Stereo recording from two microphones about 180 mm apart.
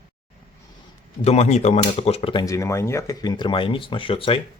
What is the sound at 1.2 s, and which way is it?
Speech, 35° left (ahead or behind).